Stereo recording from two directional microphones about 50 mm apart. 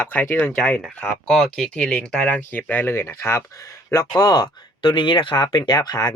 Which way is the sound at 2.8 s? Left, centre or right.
Left.